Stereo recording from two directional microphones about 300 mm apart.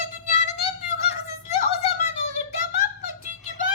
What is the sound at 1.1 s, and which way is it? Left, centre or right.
Giggle, left.